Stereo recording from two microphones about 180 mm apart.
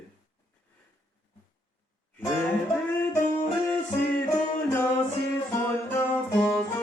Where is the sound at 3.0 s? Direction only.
15° left (ahead or behind).